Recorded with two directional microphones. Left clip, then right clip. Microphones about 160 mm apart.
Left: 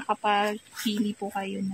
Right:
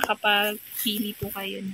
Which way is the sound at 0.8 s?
60° left (ahead or behind).